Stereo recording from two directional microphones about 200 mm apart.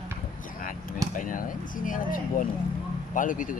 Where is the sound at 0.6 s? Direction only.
45° left (ahead or behind).